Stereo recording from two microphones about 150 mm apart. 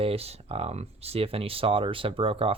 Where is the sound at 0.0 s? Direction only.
40° right (ahead or behind).